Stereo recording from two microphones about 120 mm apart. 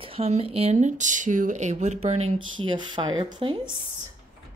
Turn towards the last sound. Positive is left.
turn(degrees=-45)  # may be behind; listen again after turning